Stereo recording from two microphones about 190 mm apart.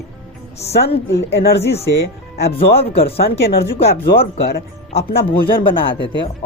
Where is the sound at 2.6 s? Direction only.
30° left (ahead or behind).